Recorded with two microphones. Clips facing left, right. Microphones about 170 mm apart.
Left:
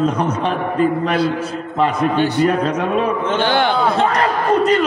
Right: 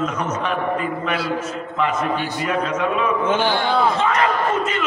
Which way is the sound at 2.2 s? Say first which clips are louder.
Left 10 dB; 70° left (ahead or behind).